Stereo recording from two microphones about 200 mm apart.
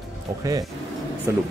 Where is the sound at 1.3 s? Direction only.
10° right (ahead or behind).